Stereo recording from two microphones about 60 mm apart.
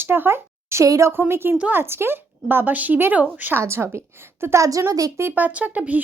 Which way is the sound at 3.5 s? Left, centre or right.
Right.